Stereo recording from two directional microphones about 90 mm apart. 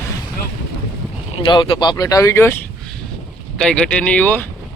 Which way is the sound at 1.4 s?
70° left (ahead or behind).